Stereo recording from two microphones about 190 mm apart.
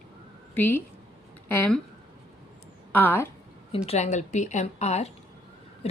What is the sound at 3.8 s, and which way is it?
A woman's voice, 35° left (ahead or behind).